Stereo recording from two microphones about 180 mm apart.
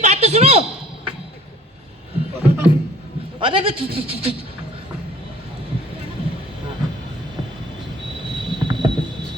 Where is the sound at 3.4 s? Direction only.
30° right (ahead or behind).